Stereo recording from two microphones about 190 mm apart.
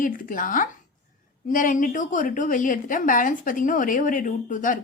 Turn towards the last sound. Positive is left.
turn(degrees=45)  # may be behind; listen again after turning